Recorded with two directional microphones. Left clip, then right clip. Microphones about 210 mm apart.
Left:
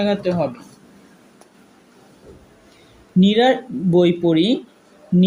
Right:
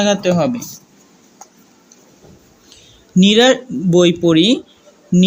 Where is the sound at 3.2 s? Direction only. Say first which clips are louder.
Right 4 dB; 30° right (ahead or behind).